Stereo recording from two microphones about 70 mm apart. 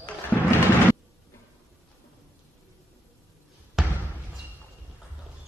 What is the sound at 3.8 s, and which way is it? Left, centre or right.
Basketball bounce, centre.